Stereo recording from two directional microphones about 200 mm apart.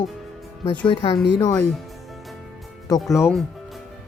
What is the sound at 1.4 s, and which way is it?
Speech, 20° left (ahead or behind).